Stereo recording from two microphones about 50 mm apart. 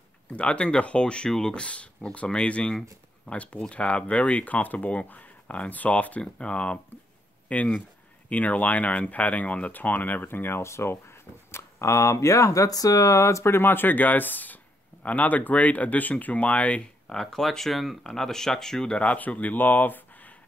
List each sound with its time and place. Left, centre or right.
0.3 s speech: left
10.6 s speech: left
17.1 s speech: centre
18.9 s speech: left